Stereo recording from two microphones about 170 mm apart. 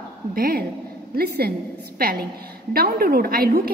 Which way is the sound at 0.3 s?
55° right (ahead or behind).